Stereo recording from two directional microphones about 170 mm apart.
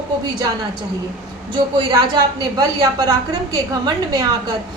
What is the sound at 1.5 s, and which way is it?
A woman's voice, 25° right (ahead or behind).